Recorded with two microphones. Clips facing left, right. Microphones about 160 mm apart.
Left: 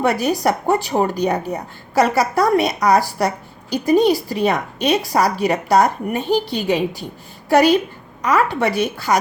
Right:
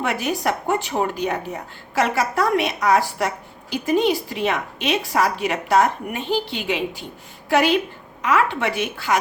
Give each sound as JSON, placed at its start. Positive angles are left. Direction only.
{"t": 0.0, "sound": "a woman's voice", "side_deg": 40}